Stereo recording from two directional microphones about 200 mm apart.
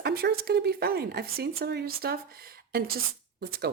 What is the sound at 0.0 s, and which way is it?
Speech, 50° right (ahead or behind).